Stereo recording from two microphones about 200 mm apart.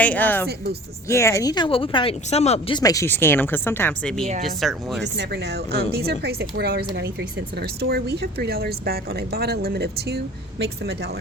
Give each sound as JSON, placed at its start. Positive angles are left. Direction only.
{"t": 0.0, "sound": "speech", "side_deg": 10}
{"t": 0.4, "sound": "speech", "side_deg": -50}
{"t": 1.0, "sound": "speech", "side_deg": 15}
{"t": 5.1, "sound": "a woman's voice", "side_deg": -55}